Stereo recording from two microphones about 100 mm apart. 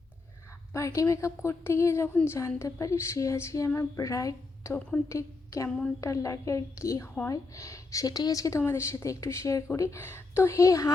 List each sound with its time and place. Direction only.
0.7 s a woman's voice: 30° left (ahead or behind)
5.6 s a woman's voice: 5° left (ahead or behind)
6.0 s a woman's voice: 30° left (ahead or behind)